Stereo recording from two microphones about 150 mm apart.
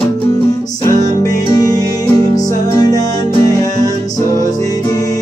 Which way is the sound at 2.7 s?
25° left (ahead or behind).